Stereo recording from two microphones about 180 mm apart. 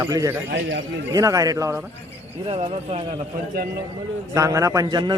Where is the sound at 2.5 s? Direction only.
35° right (ahead or behind).